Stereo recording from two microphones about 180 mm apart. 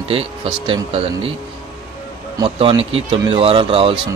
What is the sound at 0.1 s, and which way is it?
Speech, 30° right (ahead or behind).